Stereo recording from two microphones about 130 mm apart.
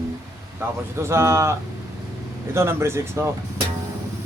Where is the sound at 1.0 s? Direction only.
20° right (ahead or behind).